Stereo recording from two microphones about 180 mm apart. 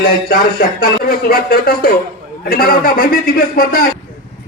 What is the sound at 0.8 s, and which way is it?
A man's voice, 55° left (ahead or behind).